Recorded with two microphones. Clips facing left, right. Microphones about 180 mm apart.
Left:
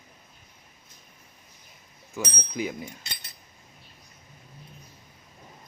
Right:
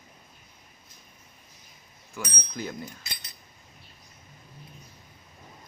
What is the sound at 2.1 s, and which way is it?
Speech, 15° left (ahead or behind).